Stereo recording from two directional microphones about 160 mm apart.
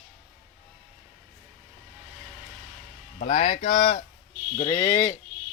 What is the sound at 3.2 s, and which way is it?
Speech, 40° left (ahead or behind).